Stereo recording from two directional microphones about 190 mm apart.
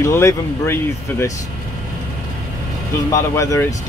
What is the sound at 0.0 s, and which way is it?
Speech, 15° left (ahead or behind).